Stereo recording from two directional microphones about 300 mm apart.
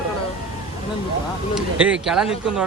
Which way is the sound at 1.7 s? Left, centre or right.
Centre.